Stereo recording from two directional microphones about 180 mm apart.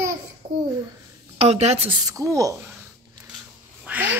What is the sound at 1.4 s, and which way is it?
Speech, 35° right (ahead or behind).